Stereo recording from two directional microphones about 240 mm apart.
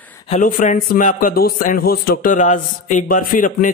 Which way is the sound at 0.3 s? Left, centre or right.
Left.